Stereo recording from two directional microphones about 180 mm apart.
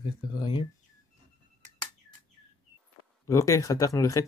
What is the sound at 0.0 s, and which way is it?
Speech, 25° left (ahead or behind).